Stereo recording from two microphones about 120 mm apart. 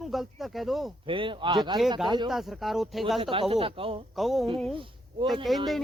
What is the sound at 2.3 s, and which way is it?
Speech, centre (ahead or behind).